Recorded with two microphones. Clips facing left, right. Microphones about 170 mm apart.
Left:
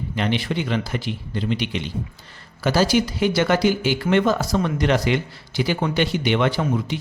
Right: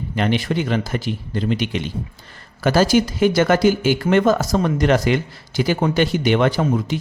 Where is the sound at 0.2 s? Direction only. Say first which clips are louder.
Right 3 dB; 45° right (ahead or behind).